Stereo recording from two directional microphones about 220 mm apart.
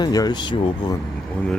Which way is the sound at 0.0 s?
20° left (ahead or behind).